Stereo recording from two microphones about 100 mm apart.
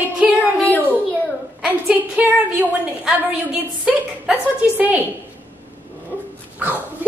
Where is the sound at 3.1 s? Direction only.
5° right (ahead or behind).